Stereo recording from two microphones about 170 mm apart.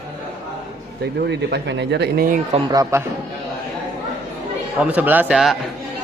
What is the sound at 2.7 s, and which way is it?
Speech, 20° right (ahead or behind).